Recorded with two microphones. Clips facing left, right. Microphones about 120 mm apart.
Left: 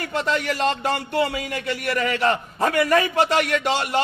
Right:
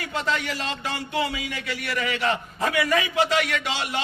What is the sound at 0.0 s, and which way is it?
A man's voice, 50° left (ahead or behind).